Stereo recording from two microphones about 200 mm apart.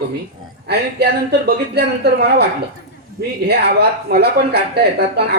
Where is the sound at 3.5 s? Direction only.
55° right (ahead or behind).